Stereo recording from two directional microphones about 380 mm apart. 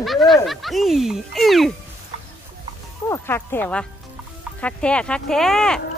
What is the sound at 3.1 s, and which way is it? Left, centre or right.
Speech, centre.